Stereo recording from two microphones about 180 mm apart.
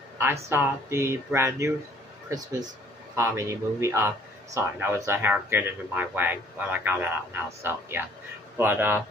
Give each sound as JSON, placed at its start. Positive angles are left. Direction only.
{"t": 0.2, "sound": "speech", "side_deg": -15}